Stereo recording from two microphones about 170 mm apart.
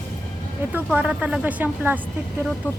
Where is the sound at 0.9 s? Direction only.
5° right (ahead or behind).